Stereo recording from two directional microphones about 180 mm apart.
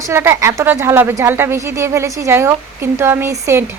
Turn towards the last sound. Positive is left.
turn(degrees=-15)  # may be behind; listen again after turning